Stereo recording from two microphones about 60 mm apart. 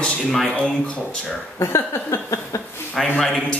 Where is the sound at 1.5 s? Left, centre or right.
Left.